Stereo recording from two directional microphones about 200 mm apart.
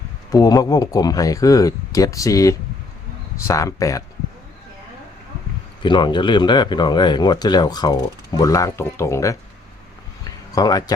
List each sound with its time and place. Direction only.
0.3 s speech: 20° left (ahead or behind)
5.8 s speech: 25° left (ahead or behind)
10.2 s a sound: 20° left (ahead or behind)